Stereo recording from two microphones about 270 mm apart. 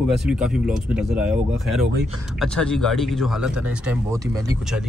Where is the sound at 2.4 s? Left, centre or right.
Centre.